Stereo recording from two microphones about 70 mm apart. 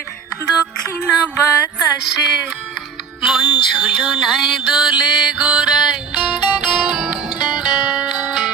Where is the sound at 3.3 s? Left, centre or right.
Centre.